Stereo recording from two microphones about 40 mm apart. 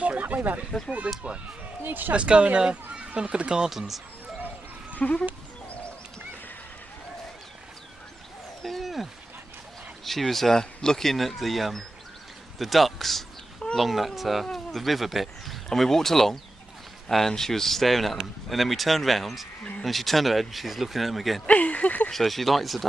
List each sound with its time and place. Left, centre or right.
0.2 s speech: right
1.1 s speech: right
1.8 s speech: right
2.1 s speech: right
3.7 s speech: centre
5.0 s speech: left
8.6 s speech: centre
21.5 s speech: left
22.1 s speech: centre